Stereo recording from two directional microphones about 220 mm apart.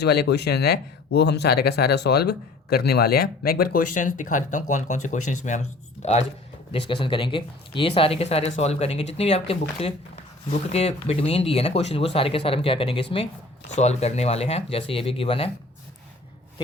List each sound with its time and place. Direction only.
0.0 s speech: 50° left (ahead or behind); by 15.4 s 25° left (ahead or behind)